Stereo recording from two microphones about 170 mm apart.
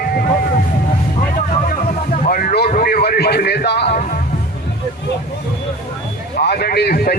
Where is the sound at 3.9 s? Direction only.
55° left (ahead or behind).